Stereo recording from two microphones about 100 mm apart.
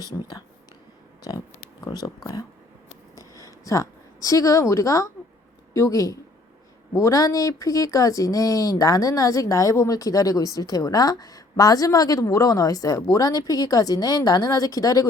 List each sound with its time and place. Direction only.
0.0 s speech: 40° left (ahead or behind)
3.2 s a sound: 35° left (ahead or behind)
5.7 s speech: 35° left (ahead or behind)